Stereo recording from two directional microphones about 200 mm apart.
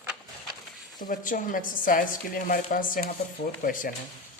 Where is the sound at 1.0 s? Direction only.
40° left (ahead or behind).